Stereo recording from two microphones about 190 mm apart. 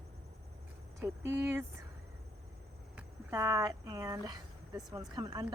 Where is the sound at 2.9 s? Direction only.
15° right (ahead or behind).